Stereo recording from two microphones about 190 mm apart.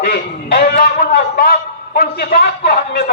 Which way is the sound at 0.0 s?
55° left (ahead or behind).